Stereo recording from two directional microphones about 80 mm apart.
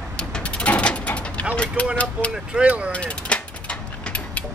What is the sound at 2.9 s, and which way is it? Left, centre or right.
Mechanisms, centre.